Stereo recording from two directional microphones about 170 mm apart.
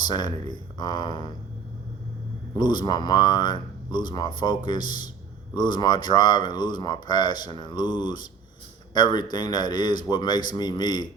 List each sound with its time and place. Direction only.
0.1 s speech: 25° left (ahead or behind)
2.6 s speech: 25° left (ahead or behind)